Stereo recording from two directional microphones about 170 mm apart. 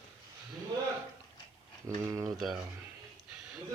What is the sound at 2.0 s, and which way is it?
Speech, 20° right (ahead or behind).